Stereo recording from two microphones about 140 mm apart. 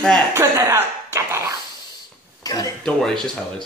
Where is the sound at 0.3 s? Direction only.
20° right (ahead or behind).